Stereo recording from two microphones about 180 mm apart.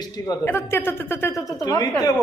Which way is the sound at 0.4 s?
15° left (ahead or behind).